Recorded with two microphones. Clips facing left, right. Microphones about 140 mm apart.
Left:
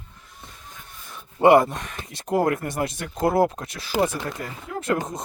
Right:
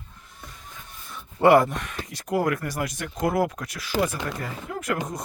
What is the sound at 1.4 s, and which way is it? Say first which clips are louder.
Speech: left 2 dB; 20° left (ahead or behind).